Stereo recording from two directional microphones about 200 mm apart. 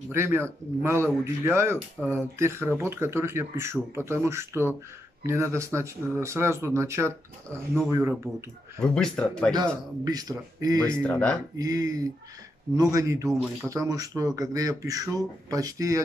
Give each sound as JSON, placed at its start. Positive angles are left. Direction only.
{"t": 0.1, "sound": "speech", "side_deg": -10}
{"t": 8.7, "sound": "speech", "side_deg": 5}
{"t": 10.0, "sound": "speech", "side_deg": -20}
{"t": 10.9, "sound": "speech", "side_deg": 5}
{"t": 11.5, "sound": "speech", "side_deg": -20}